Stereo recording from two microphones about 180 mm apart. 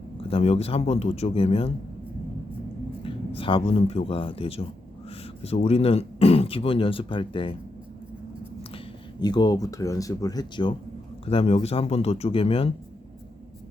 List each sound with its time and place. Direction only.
0.3 s speech: 35° left (ahead or behind)
3.0 s speech: 30° left (ahead or behind)
9.2 s speech: 25° left (ahead or behind)